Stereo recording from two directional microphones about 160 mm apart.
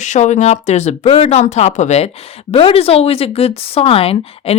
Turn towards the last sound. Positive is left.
turn(degrees=35)  # may be behind; listen again after turning